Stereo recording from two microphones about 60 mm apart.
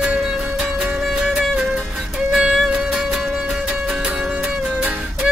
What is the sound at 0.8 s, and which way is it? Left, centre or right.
Music, centre.